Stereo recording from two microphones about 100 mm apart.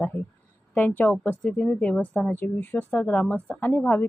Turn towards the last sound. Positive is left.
turn(degrees=20)  # may be behind; listen again after turning